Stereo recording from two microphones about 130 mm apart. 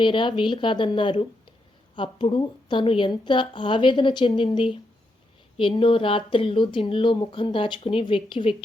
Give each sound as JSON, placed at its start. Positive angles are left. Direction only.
{"t": 0.0, "sound": "speech", "side_deg": 40}